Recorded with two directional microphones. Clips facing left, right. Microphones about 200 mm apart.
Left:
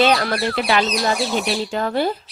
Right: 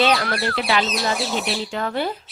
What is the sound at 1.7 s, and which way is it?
Speech, 40° left (ahead or behind).